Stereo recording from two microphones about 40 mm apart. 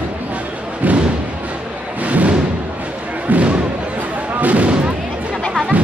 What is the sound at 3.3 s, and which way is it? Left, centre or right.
Thump, right.